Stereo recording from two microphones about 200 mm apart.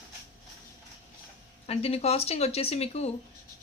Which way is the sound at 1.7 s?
30° left (ahead or behind).